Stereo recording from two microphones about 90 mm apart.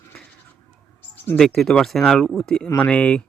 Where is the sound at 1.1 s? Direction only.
20° left (ahead or behind).